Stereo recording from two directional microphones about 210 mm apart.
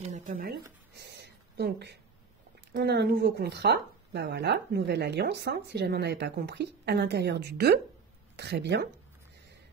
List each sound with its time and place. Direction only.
0.1 s speech: 40° right (ahead or behind)
0.9 s a sound: 55° right (ahead or behind)
2.7 s speech: 50° right (ahead or behind)